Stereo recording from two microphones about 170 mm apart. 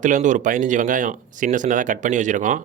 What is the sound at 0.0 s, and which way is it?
Speech, 50° right (ahead or behind).